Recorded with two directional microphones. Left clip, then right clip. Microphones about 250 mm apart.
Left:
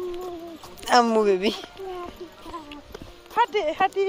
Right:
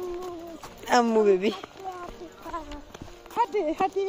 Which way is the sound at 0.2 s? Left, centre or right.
Centre.